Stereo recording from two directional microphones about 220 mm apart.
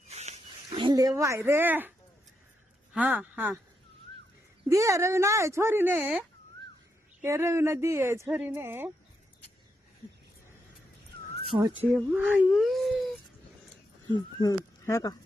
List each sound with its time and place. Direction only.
0.1 s a sound: 30° right (ahead or behind); by 1.9 s 10° right (ahead or behind)
2.9 s speech: 5° right (ahead or behind)
4.7 s speech: 15° right (ahead or behind)
11.4 s speech: 25° right (ahead or behind)
11.9 s speech: 5° right (ahead or behind)
14.1 s speech: 15° left (ahead or behind)